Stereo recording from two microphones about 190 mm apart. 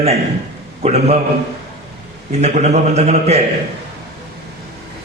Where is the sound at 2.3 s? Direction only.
35° right (ahead or behind).